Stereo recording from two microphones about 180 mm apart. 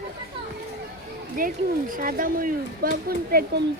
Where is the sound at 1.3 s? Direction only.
50° right (ahead or behind).